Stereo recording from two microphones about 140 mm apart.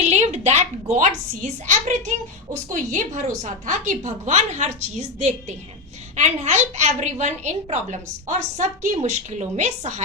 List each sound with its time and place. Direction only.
0.0 s a woman's voice: 50° right (ahead or behind)